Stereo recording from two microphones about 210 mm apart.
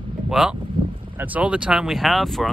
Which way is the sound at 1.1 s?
5° right (ahead or behind).